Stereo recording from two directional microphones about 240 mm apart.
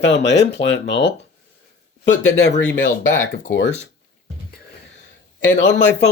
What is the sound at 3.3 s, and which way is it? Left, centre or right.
Speech, left.